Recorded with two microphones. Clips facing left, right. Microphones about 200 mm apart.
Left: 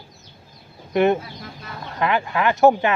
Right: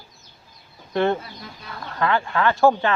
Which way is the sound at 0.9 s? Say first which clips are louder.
Left 3 dB; 15° left (ahead or behind).